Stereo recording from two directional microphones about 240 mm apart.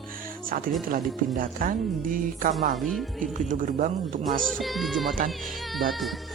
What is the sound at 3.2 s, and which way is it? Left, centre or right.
Speech, right.